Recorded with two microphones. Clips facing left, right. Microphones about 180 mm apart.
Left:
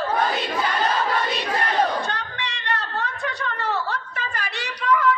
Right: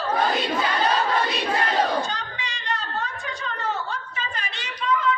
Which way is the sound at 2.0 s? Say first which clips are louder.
Left 1 dB; 65° left (ahead or behind).